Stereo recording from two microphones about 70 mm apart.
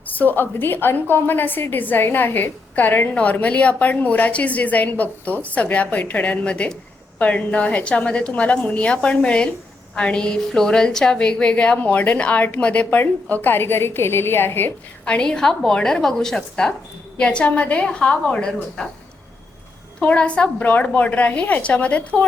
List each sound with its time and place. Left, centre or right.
0.1 s a woman's voice: left
15.0 s a woman's voice: centre
20.0 s a woman's voice: centre